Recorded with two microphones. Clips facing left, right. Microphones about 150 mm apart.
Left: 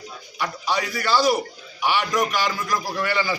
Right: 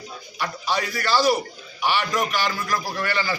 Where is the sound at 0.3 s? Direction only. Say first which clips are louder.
Left 1 dB; 15° left (ahead or behind).